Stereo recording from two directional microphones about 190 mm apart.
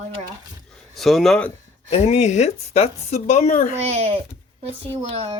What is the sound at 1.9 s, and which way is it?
Speech, 35° left (ahead or behind).